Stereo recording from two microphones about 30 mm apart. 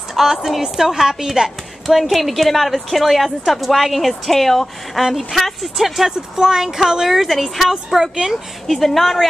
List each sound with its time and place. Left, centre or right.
0.1 s a sound: centre
0.6 s a woman's voice: centre
1.9 s a woman's voice: centre
6.3 s a woman's voice: centre
7.2 s a woman's voice: centre
8.6 s a woman's voice: centre